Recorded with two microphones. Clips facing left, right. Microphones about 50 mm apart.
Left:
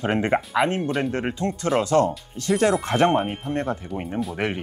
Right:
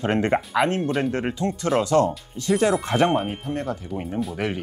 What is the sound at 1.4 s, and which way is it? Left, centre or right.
Speech, left.